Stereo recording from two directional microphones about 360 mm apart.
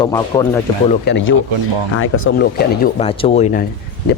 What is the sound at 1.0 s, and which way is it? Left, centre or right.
Speech, left.